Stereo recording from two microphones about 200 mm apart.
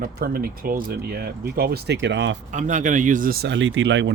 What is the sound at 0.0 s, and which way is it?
Speech, 45° right (ahead or behind).